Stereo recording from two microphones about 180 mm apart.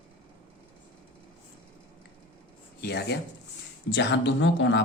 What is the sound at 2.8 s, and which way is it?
Speech, 70° left (ahead or behind).